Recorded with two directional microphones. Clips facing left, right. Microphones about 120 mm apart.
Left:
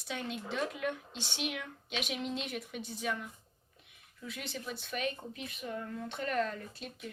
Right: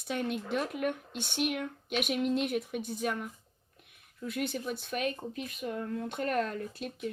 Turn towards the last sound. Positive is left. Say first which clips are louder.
# right 7 dB
turn(degrees=-50)  # may be behind; listen again after turning